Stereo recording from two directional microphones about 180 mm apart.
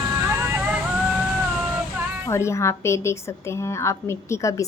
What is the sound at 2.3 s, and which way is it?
A woman's voice, 15° left (ahead or behind).